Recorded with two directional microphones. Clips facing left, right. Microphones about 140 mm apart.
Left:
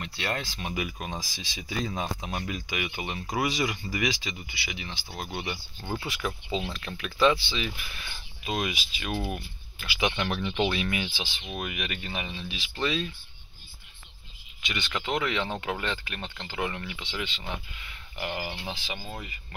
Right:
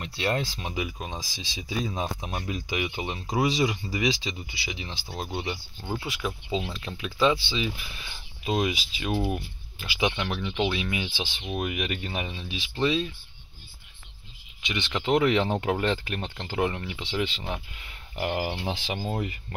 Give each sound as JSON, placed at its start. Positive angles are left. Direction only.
{"t": 0.0, "sound": "speech", "side_deg": -30}
{"t": 2.4, "sound": "speech", "side_deg": -30}
{"t": 5.8, "sound": "speech", "side_deg": -5}
{"t": 10.2, "sound": "speech", "side_deg": 0}
{"t": 10.9, "sound": "speech", "side_deg": -20}
{"t": 12.4, "sound": "speech", "side_deg": -20}
{"t": 14.6, "sound": "speech", "side_deg": -20}
{"t": 15.1, "sound": "speech", "side_deg": -35}
{"t": 18.5, "sound": "speech", "side_deg": -30}